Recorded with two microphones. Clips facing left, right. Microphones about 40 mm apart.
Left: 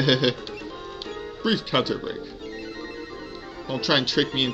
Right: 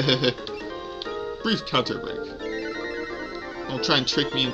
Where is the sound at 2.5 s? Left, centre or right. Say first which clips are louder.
Right 8 dB; right.